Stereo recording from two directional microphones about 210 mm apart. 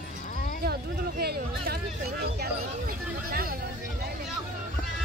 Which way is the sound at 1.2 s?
50° right (ahead or behind).